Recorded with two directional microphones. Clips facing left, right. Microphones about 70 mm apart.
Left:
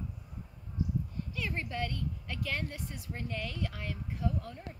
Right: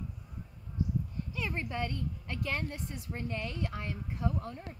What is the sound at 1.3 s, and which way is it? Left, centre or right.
A woman's voice, right.